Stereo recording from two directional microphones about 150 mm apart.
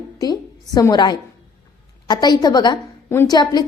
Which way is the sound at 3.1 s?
15° left (ahead or behind).